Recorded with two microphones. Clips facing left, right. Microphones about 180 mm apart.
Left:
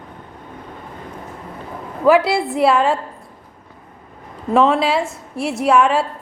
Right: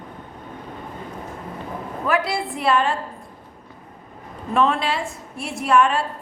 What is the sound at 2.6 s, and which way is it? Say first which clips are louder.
Speech: left 5 dB; 90° left.